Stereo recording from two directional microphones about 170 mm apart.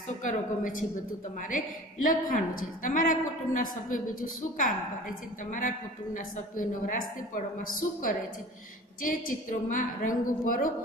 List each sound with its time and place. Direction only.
0.2 s a woman's voice: 50° left (ahead or behind)